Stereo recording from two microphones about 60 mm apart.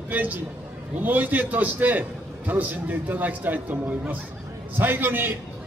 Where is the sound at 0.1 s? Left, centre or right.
Right.